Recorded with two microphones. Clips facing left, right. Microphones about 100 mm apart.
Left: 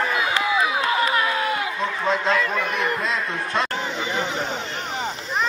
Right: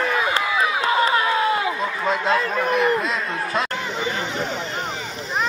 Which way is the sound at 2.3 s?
35° right (ahead or behind).